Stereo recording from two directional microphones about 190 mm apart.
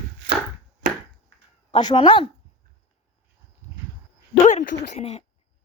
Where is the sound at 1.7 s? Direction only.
25° left (ahead or behind).